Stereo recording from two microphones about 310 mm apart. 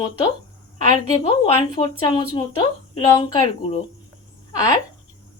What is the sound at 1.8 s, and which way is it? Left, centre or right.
Speech, centre.